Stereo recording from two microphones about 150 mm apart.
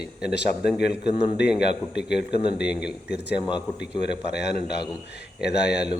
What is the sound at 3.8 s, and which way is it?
Speech, 90° left.